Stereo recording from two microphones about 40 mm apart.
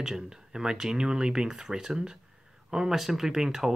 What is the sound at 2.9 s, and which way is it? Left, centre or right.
Speech, centre.